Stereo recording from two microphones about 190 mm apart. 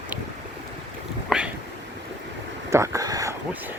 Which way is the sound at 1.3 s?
Centre (ahead or behind).